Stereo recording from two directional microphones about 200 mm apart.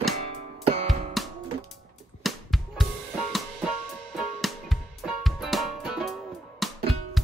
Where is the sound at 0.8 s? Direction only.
Centre (ahead or behind).